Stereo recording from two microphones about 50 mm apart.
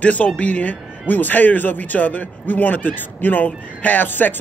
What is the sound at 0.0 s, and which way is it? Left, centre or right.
A man's voice, left.